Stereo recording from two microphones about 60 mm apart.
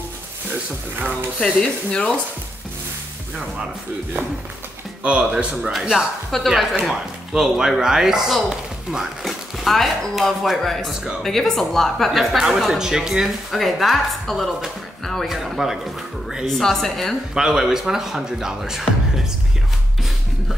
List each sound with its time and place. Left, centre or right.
1.4 s speech: centre
5.0 s speech: centre
5.6 s a woman's voice: centre
17.3 s speech: centre